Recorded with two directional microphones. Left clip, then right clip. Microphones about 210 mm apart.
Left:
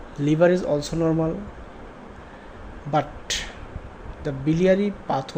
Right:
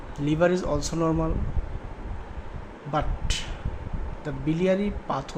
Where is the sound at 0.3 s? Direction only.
15° left (ahead or behind).